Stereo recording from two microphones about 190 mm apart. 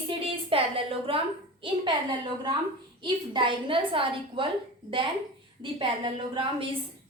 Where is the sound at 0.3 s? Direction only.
30° right (ahead or behind).